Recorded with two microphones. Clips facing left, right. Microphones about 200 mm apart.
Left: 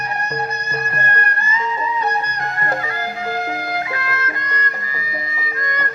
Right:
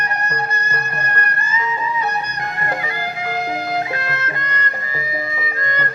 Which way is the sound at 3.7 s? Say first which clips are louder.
Right 2 dB; 25° right (ahead or behind).